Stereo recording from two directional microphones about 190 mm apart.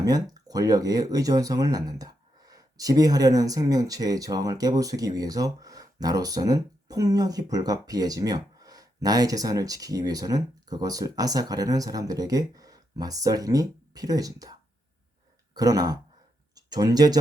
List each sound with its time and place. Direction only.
0.0 s speech: 20° right (ahead or behind)
15.5 s speech: 20° right (ahead or behind)